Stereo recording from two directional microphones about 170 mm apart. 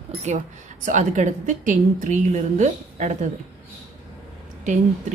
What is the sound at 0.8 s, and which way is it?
Speech, 45° right (ahead or behind).